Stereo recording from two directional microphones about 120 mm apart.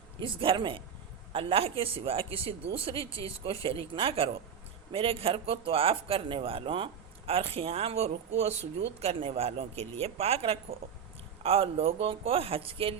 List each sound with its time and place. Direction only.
0.2 s speech: 45° right (ahead or behind)
3.1 s speech: 25° left (ahead or behind)
3.4 s speech: 50° right (ahead or behind)